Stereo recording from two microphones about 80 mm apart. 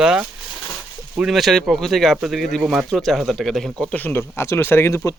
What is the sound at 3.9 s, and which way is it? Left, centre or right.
Speech, left.